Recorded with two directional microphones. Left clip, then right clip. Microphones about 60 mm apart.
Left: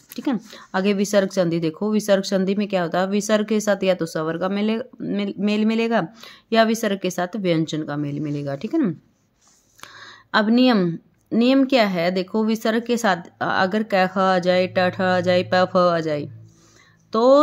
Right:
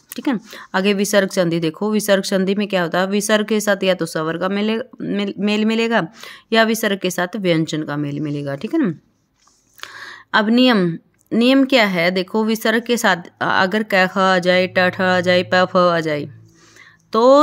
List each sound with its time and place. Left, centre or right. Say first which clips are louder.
0.1 s speech: right 3 dB; right